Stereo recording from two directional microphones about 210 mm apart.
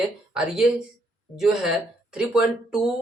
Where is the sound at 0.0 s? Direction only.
5° right (ahead or behind).